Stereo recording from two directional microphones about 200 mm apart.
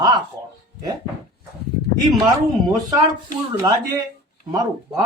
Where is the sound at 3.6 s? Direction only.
15° right (ahead or behind).